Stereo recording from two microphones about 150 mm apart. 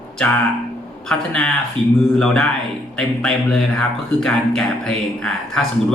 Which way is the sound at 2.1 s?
5° left (ahead or behind).